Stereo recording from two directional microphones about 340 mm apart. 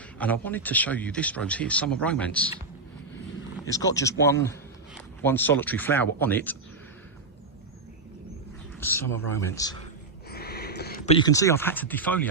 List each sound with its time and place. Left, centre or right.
0.2 s speech: centre
3.9 s speech: left
5.2 s speech: centre
8.8 s speech: centre
10.2 s speech: left; by 12.3 s centre